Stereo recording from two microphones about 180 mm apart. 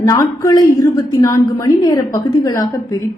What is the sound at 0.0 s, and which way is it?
A woman's voice, 20° left (ahead or behind).